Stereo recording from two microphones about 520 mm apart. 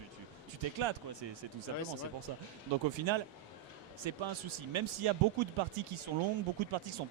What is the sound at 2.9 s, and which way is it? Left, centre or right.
Speech, right.